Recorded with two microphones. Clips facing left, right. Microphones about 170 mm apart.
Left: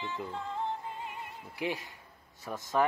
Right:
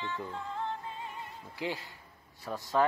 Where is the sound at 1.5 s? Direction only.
15° left (ahead or behind).